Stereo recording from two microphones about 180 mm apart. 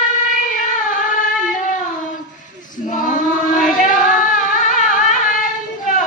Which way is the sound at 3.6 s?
45° left (ahead or behind).